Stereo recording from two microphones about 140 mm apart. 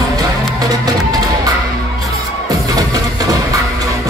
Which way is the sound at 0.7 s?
30° right (ahead or behind).